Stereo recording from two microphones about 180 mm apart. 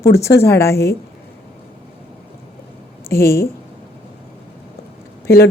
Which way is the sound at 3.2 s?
60° left (ahead or behind).